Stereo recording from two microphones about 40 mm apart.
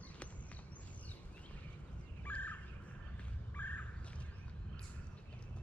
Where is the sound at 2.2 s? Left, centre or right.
Left.